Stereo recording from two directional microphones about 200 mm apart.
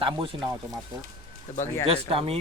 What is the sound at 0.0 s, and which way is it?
Speech, 25° right (ahead or behind).